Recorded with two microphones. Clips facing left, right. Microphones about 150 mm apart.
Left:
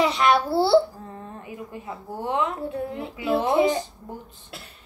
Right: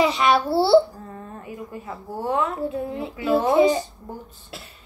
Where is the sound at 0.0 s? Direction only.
Centre (ahead or behind).